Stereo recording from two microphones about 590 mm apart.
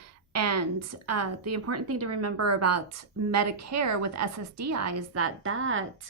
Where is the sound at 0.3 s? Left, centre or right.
Right.